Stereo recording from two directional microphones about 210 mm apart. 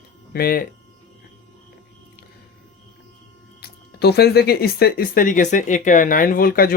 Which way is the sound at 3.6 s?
50° left (ahead or behind).